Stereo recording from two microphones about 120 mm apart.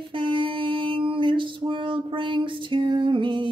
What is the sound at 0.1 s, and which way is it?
Music, 45° right (ahead or behind).